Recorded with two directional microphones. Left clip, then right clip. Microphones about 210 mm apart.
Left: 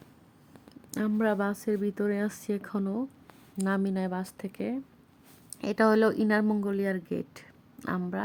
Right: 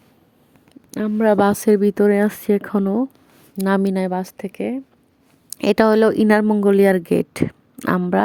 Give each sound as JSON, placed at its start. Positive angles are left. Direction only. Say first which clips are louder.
{"t": 0.7, "sound": "a sound", "louder": "right 8 dB", "side_deg": -20}
{"t": 1.4, "sound": "speech", "louder": "right 15 dB", "side_deg": -45}
{"t": 5.5, "sound": "speech", "louder": "right 10 dB", "side_deg": -45}